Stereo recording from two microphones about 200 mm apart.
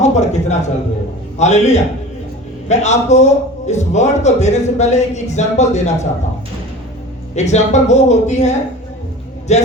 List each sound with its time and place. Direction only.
0.0 s a sound: 35° left (ahead or behind)
1.4 s a man's voice: 35° left (ahead or behind)
7.3 s a man's voice: 35° left (ahead or behind)